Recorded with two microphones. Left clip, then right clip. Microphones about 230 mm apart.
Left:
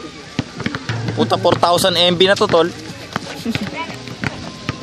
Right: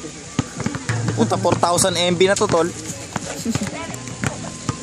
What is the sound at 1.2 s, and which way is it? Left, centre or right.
Speech, centre.